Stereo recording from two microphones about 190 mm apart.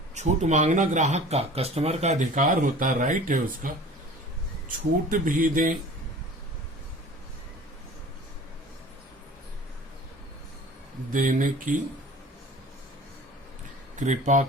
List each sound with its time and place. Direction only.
0.1 s speech: 35° right (ahead or behind)
5.1 s speech: 45° right (ahead or behind)
11.1 s speech: 45° right (ahead or behind)
13.9 s speech: 40° right (ahead or behind)